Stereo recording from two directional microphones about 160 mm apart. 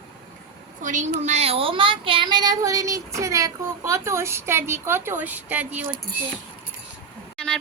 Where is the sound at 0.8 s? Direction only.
50° right (ahead or behind); by 5.9 s 10° right (ahead or behind).